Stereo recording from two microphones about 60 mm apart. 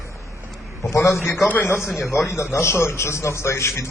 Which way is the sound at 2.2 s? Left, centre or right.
Left.